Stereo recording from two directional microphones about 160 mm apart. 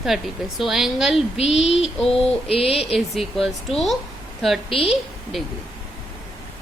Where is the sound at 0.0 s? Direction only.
Centre (ahead or behind).